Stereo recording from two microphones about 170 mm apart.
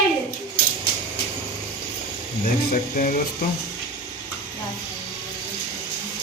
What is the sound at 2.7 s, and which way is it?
Music, 50° left (ahead or behind).